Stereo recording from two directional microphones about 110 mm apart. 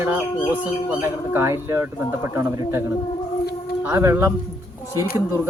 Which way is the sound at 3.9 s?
25° right (ahead or behind).